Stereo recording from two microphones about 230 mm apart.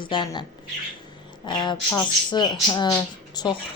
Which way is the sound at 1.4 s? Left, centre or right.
Centre.